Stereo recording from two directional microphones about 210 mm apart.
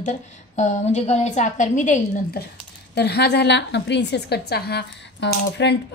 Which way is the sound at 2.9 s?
50° left (ahead or behind).